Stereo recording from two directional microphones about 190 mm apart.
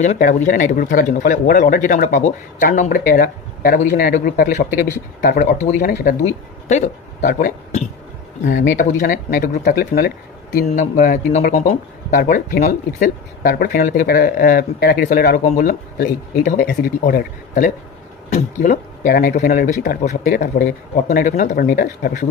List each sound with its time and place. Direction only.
0.0 s speech: 40° left (ahead or behind)
6.7 s speech: 40° left (ahead or behind); by 10.6 s 55° left (ahead or behind)
10.7 s speech: 40° left (ahead or behind)